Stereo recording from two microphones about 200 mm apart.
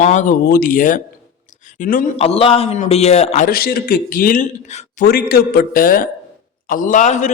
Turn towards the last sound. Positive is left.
turn(degrees=35)  # may be behind; listen again after turning